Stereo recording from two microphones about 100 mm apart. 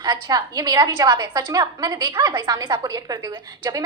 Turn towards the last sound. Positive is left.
turn(degrees=-35)  # may be behind; listen again after turning